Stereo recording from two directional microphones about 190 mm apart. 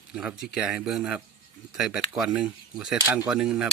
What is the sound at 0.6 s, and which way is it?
Speech, 5° right (ahead or behind).